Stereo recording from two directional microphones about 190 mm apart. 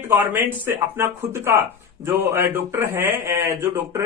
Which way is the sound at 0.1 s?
10° right (ahead or behind).